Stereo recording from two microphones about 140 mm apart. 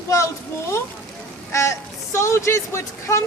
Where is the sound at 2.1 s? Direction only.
20° left (ahead or behind).